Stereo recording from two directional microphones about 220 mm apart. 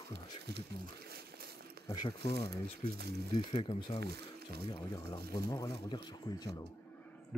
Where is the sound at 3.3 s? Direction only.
25° left (ahead or behind).